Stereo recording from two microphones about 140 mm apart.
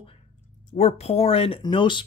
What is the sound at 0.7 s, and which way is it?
Speech, 50° left (ahead or behind).